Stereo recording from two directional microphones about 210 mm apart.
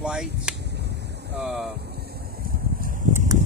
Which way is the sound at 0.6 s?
50° right (ahead or behind).